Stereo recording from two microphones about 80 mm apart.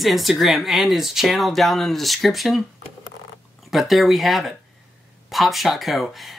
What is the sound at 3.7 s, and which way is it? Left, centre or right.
Speech, centre.